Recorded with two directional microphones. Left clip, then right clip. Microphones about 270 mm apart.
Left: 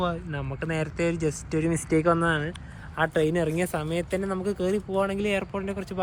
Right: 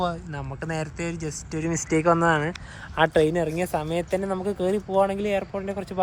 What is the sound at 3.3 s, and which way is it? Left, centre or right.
A man's voice, centre.